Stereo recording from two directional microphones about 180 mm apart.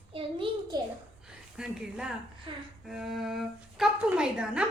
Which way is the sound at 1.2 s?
5° right (ahead or behind).